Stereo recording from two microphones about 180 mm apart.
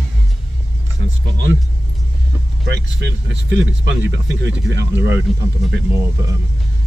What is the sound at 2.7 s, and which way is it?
Speech, 80° right.